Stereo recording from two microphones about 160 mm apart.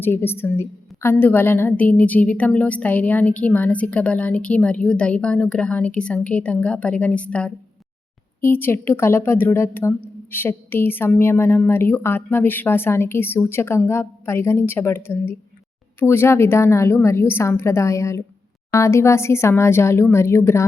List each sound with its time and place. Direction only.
0.0 s a woman's voice: 15° left (ahead or behind)